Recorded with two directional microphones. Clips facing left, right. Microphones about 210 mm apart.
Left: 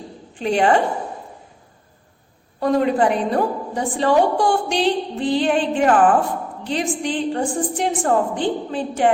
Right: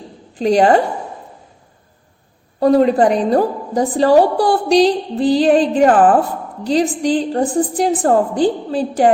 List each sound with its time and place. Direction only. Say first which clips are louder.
0.3 s a woman's voice: right 5 dB; 35° right (ahead or behind)
2.6 s a woman's voice: right 6 dB; 35° right (ahead or behind)